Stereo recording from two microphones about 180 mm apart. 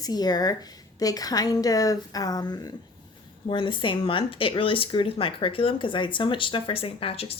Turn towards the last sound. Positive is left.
turn(degrees=30)  # may be behind; listen again after turning